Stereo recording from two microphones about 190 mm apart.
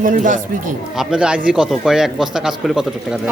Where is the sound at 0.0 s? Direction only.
45° right (ahead or behind).